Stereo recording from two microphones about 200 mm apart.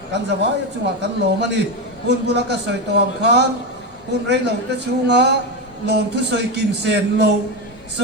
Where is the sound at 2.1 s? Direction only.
55° right (ahead or behind).